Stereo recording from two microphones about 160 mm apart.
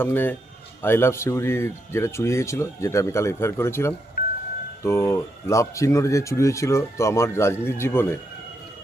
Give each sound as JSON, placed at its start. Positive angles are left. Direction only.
{"t": 0.0, "sound": "speech", "side_deg": 15}